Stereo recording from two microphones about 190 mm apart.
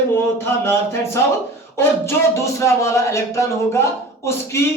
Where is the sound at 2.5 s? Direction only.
15° left (ahead or behind).